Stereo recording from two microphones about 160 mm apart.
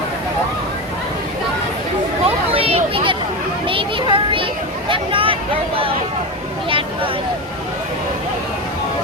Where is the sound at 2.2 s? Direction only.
35° right (ahead or behind).